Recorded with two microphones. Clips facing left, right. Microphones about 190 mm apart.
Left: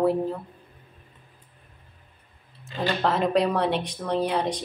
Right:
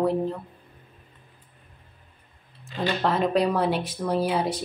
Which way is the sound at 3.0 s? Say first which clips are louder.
Even; centre (ahead or behind).